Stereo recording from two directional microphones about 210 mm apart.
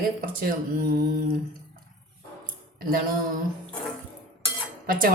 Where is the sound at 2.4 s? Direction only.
45° right (ahead or behind).